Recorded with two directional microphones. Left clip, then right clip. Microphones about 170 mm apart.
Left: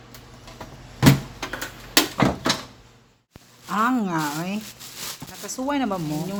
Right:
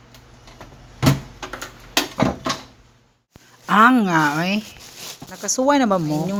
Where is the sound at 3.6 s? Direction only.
40° right (ahead or behind).